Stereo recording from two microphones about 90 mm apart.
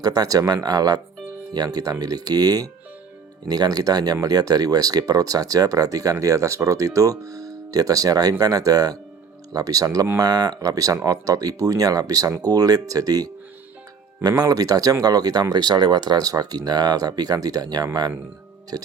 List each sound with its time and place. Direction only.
0.0 s speech: 45° right (ahead or behind)